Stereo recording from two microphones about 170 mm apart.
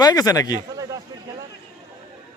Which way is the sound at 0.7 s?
20° right (ahead or behind).